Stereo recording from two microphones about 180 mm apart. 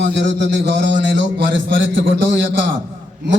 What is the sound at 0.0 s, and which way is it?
A man's voice, 75° right (ahead or behind).